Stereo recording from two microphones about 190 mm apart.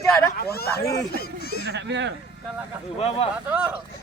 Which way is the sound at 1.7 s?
65° right (ahead or behind).